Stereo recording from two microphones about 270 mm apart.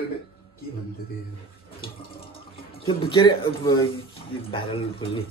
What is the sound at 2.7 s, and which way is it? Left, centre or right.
Speech, left.